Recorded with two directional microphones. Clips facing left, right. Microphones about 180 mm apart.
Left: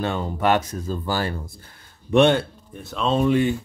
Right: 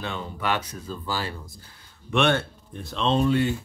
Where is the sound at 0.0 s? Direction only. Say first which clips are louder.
Left 8 dB; 45° left (ahead or behind).